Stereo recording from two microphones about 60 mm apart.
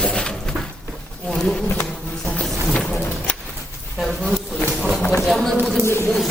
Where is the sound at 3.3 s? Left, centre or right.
Left.